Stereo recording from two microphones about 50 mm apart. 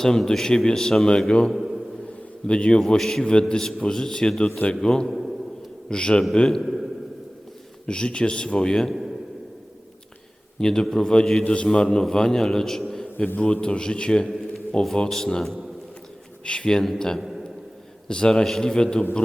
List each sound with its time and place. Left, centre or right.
0.0 s a man's voice: centre
1.5 s a sound: centre
2.5 s a man's voice: left
5.0 s a man's voice: centre
5.9 s a man's voice: centre
6.6 s a man's voice: centre
7.9 s a man's voice: centre
10.6 s a man's voice: centre
13.1 s a man's voice: left
13.4 s a man's voice: centre
16.4 s a man's voice: centre
17.2 s a man's voice: centre
18.3 s a man's voice: centre